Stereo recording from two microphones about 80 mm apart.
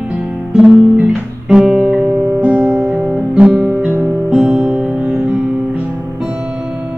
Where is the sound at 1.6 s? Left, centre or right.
Centre.